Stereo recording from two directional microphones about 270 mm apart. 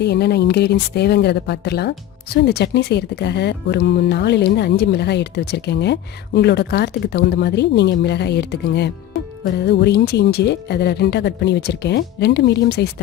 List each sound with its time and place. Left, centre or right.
0.0 s speech: left